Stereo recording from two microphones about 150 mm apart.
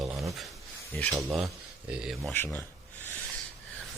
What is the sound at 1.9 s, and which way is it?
Speech, centre (ahead or behind).